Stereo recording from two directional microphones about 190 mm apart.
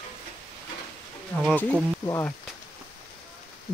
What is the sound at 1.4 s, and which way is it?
Speech, 5° left (ahead or behind).